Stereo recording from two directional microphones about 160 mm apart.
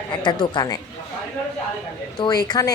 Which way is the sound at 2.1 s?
25° left (ahead or behind).